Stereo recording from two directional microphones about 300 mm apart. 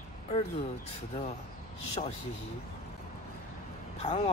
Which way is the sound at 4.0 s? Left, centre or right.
Left.